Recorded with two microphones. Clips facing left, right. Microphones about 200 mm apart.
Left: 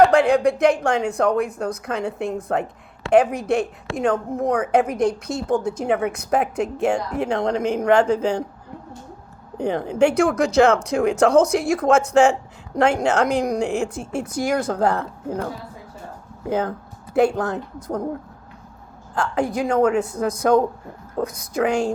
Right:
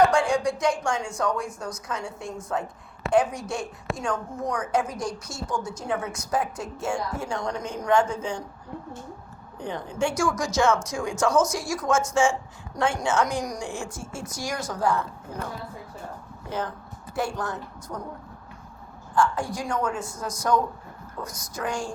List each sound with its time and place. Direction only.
0.0 s speech: 60° left (ahead or behind)
9.6 s speech: 65° left (ahead or behind)
16.5 s speech: 55° left (ahead or behind)
19.2 s speech: 60° left (ahead or behind)